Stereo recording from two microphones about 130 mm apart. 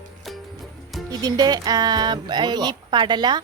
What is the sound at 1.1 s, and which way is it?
Speech, 30° right (ahead or behind).